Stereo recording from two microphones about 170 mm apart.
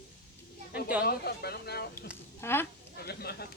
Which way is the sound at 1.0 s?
70° left (ahead or behind).